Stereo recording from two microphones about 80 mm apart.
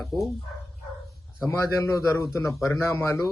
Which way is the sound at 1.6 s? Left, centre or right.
Left.